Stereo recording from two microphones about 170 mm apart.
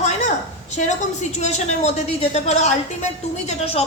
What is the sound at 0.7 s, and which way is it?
A woman's voice, 45° left (ahead or behind).